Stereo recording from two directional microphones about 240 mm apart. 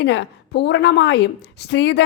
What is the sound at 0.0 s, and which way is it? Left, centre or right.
A woman's voice, left.